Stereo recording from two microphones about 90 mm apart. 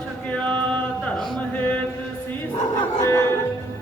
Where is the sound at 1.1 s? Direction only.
Centre (ahead or behind).